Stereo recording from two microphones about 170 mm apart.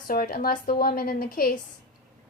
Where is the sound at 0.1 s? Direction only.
60° left (ahead or behind).